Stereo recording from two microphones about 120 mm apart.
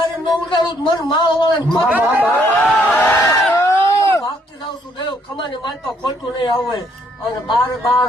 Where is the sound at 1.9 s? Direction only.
15° right (ahead or behind).